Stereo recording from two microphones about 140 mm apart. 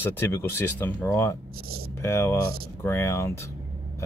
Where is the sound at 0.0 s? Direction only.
15° left (ahead or behind).